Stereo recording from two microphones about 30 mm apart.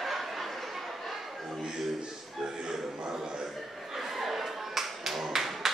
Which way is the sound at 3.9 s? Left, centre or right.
Centre.